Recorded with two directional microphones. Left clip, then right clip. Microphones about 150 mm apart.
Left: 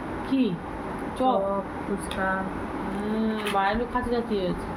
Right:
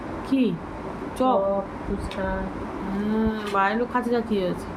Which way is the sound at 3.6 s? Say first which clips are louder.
Right 3 dB; 15° right (ahead or behind).